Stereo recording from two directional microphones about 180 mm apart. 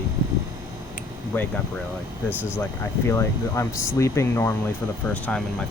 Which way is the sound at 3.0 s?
15° left (ahead or behind).